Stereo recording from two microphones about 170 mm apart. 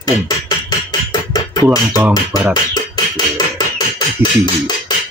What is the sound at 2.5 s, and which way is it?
Beatboxing, 25° left (ahead or behind).